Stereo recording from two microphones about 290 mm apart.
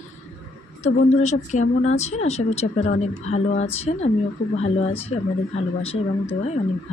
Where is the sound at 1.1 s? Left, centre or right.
Left.